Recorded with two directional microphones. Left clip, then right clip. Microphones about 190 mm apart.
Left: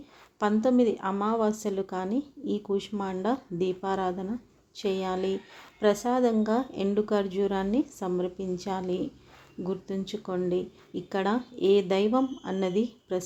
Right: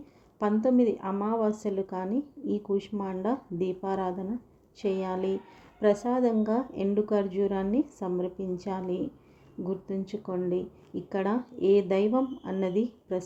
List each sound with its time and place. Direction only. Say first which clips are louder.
0.3 s speech: left 1 dB; 10° right (ahead or behind)